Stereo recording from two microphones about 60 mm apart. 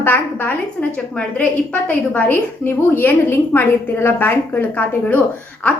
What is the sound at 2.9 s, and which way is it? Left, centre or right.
A woman's voice, left.